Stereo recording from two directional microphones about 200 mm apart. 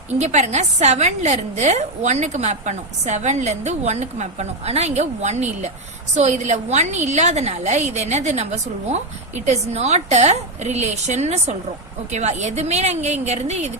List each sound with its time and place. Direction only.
0.2 s a woman's voice: 35° right (ahead or behind)